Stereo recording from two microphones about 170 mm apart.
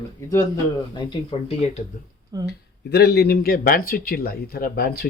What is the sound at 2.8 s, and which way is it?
A man's voice, 70° left (ahead or behind).